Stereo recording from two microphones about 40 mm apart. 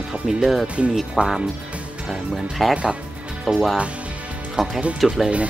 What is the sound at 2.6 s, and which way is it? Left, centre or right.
Speech, centre.